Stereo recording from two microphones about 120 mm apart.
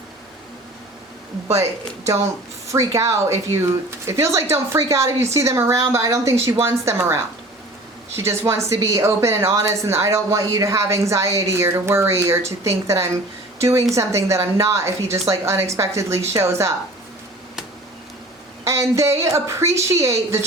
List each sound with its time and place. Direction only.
2.7 s speech: 25° right (ahead or behind)
8.1 s speech: 20° right (ahead or behind)
18.6 s speech: 25° right (ahead or behind)